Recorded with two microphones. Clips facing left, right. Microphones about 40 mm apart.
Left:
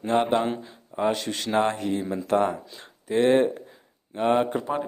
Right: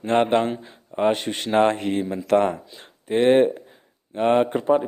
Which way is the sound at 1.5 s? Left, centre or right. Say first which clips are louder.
Right 5 dB; right.